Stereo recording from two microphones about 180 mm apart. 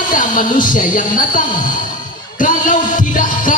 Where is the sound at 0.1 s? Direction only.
50° left (ahead or behind).